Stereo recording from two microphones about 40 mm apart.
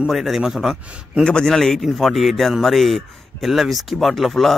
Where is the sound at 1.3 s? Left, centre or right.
Centre.